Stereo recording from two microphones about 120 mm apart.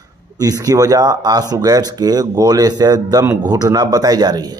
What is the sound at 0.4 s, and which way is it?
Speech, 30° right (ahead or behind).